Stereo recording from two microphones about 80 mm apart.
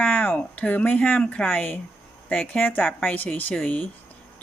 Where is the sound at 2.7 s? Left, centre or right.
Centre.